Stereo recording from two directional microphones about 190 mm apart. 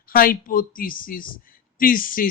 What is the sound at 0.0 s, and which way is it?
Speech, 50° left (ahead or behind).